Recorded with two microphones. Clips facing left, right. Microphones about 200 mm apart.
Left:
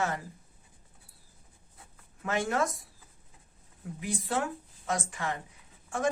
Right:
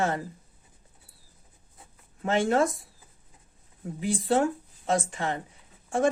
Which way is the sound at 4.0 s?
30° right (ahead or behind).